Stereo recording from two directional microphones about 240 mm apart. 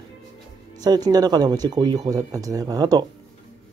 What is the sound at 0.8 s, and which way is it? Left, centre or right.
Speech, centre.